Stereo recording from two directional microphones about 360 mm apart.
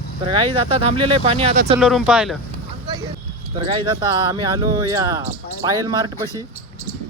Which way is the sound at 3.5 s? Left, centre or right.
Centre.